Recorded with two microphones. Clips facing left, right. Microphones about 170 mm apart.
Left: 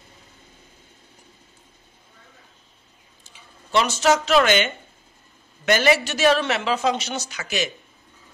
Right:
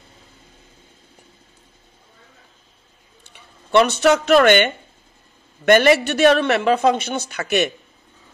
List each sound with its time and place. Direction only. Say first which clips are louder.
3.3 s speech: right 6 dB; 60° right (ahead or behind)